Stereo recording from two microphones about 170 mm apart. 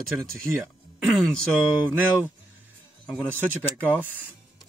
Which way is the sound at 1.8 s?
10° right (ahead or behind).